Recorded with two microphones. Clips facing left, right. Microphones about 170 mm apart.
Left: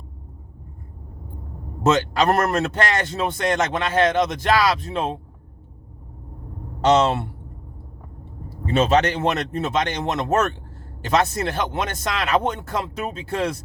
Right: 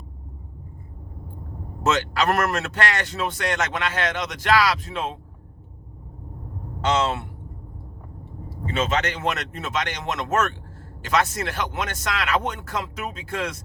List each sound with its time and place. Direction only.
2.0 s a man's voice: 25° left (ahead or behind)
6.8 s speech: 35° left (ahead or behind)
8.6 s a man's voice: 35° left (ahead or behind)